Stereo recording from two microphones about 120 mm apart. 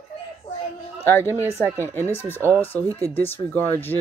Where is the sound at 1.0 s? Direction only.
20° left (ahead or behind).